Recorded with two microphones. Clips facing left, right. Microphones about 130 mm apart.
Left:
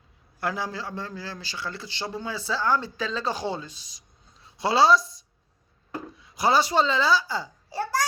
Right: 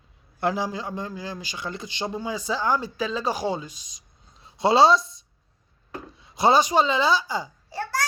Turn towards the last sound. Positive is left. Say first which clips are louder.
# left 2 dB
turn(degrees=15)  # may be behind; listen again after turning